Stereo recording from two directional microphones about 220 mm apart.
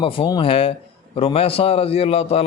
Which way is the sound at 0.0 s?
20° left (ahead or behind).